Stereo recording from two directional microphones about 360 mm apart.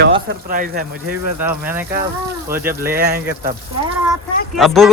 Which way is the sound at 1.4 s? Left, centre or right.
Centre.